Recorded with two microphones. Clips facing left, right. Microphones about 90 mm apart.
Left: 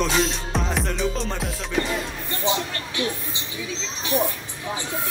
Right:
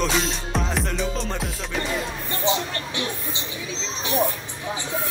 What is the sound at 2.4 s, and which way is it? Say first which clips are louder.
Speech: right 1 dB; 25° right (ahead or behind).